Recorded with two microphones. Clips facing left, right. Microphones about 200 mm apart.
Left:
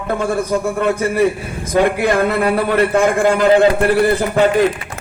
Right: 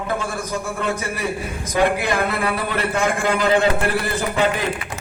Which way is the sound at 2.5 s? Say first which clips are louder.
Left 8 dB; 55° left (ahead or behind).